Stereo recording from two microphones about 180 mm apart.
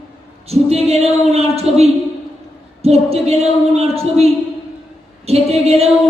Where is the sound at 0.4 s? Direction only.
35° right (ahead or behind).